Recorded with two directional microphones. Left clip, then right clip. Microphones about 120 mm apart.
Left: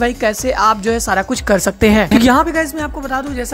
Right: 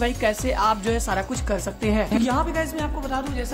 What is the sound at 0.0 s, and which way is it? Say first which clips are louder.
Speech: left 7 dB; 50° left (ahead or behind).